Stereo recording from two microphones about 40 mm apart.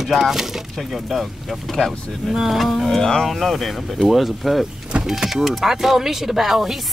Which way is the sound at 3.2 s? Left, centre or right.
Centre.